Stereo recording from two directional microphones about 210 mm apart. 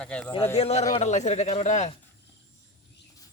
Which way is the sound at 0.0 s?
5° left (ahead or behind).